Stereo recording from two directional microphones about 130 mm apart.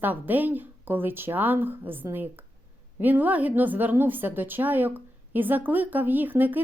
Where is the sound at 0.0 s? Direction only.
15° right (ahead or behind).